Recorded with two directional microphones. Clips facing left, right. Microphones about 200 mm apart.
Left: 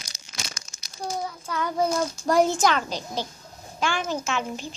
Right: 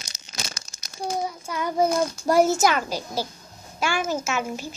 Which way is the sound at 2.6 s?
10° right (ahead or behind).